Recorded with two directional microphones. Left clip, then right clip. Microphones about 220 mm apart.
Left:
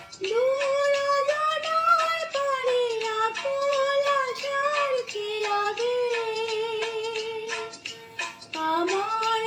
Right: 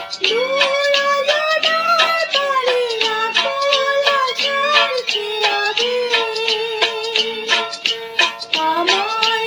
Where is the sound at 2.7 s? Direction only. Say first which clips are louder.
Right 8 dB; 35° right (ahead or behind).